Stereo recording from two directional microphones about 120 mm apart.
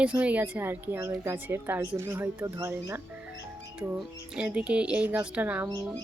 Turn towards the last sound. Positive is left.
turn(degrees=-15)  # may be behind; listen again after turning